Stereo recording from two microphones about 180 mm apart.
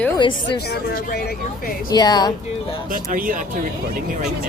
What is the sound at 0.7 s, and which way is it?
Speech, 60° left (ahead or behind).